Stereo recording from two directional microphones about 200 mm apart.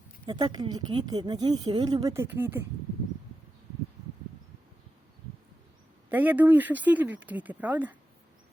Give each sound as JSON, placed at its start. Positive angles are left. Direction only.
{"t": 0.3, "sound": "speech", "side_deg": -20}
{"t": 6.1, "sound": "speech", "side_deg": -10}